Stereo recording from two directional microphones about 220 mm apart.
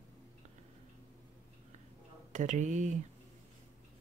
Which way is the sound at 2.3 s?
35° right (ahead or behind).